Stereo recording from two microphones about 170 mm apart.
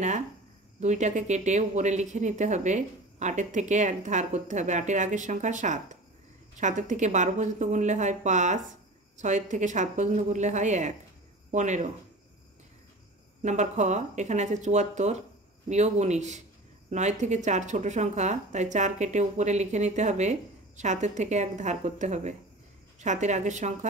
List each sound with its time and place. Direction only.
0.7 s speech: 45° right (ahead or behind)
13.4 s speech: 45° right (ahead or behind)